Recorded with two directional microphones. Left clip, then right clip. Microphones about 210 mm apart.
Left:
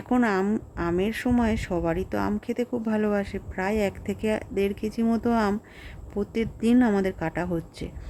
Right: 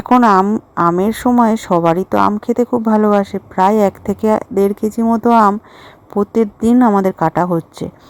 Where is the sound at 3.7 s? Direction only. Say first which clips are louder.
Right 13 dB; 90° right.